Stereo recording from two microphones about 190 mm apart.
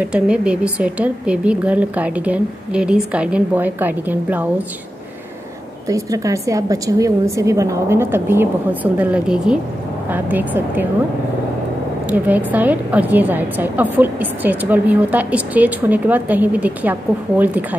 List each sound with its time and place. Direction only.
0.0 s a woman's voice: 5° right (ahead or behind)
5.9 s a woman's voice: 15° right (ahead or behind)
12.1 s a woman's voice: 10° right (ahead or behind)